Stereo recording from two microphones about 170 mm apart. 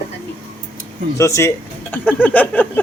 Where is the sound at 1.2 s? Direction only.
15° left (ahead or behind).